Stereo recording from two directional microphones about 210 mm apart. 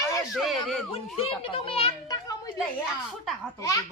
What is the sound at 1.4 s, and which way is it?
A child's voice, 25° left (ahead or behind).